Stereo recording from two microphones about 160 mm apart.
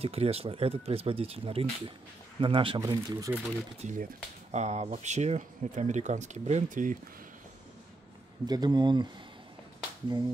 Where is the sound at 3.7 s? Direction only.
50° right (ahead or behind).